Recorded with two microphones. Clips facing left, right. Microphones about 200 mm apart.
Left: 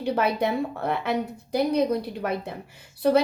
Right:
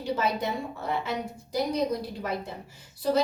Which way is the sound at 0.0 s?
60° left (ahead or behind).